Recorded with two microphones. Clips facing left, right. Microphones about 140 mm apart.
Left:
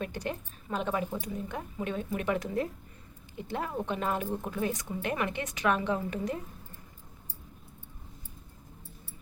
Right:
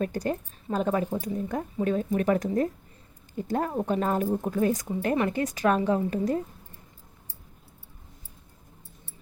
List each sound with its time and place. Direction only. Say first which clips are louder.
0.0 s a woman's voice: right 7 dB; 40° right (ahead or behind)